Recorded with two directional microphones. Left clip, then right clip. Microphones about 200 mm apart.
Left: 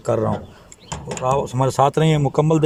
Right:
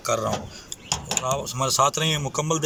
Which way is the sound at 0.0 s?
40° left (ahead or behind).